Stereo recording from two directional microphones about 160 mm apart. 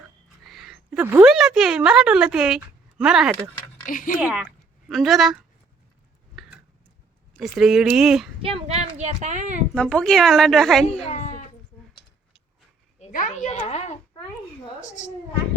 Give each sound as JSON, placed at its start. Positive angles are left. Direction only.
{"t": 0.4, "sound": "a sound", "side_deg": 0}
{"t": 1.3, "sound": "a woman's voice", "side_deg": -5}
{"t": 3.8, "sound": "speech", "side_deg": 55}
{"t": 4.2, "sound": "speech", "side_deg": -10}
{"t": 6.3, "sound": "tick-tock", "side_deg": 0}
{"t": 7.3, "sound": "a woman's voice", "side_deg": 0}
{"t": 8.4, "sound": "a woman's voice", "side_deg": -35}
{"t": 9.7, "sound": "a woman's voice", "side_deg": 5}
{"t": 11.1, "sound": "baby cry", "side_deg": 45}
{"t": 13.0, "sound": "a woman's voice", "side_deg": 50}